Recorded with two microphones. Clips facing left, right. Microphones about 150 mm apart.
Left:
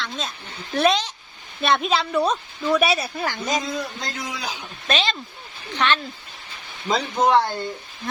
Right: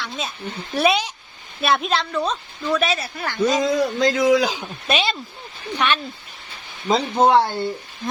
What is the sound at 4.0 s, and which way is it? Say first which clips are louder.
Speech: right 15 dB; 90° right.